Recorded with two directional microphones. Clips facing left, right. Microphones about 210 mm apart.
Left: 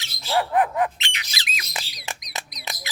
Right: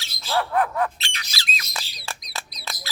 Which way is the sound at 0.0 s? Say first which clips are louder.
Left 1 dB; 15° left (ahead or behind).